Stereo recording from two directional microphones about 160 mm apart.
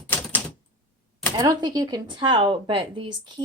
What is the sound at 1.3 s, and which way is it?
Speech, 25° right (ahead or behind).